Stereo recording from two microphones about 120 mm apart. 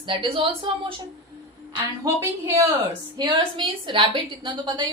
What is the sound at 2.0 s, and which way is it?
Speech, 20° right (ahead or behind).